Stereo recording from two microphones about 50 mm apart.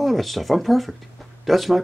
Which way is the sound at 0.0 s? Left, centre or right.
Centre.